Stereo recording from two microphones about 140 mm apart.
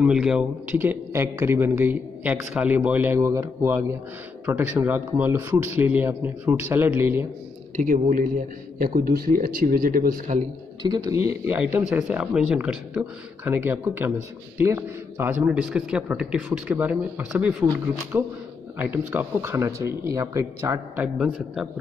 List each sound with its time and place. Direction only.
0.0 s a man's voice: 5° right (ahead or behind)
7.7 s a man's voice: 70° right (ahead or behind)
10.8 s a man's voice: 25° right (ahead or behind); by 17.6 s 5° right (ahead or behind)
18.1 s a man's voice: 15° right (ahead or behind)